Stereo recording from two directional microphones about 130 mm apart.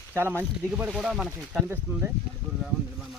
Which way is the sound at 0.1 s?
15° right (ahead or behind).